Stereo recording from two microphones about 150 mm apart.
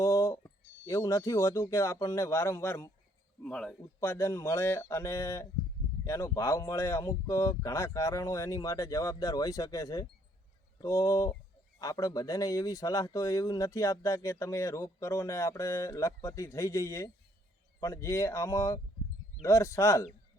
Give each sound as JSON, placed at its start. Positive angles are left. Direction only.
{"t": 0.0, "sound": "a man's voice", "side_deg": 20}
{"t": 3.4, "sound": "speech", "side_deg": 5}
{"t": 4.0, "sound": "speech", "side_deg": 20}